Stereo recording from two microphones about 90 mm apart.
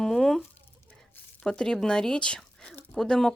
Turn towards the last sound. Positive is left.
turn(degrees=5)  # may be behind; listen again after turning